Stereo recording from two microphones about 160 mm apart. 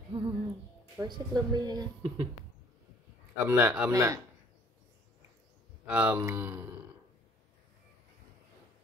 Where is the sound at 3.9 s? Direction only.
20° right (ahead or behind).